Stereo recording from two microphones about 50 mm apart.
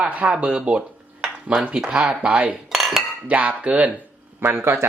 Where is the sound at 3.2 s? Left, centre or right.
Right.